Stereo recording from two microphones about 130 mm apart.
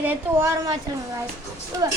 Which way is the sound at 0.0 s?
15° right (ahead or behind).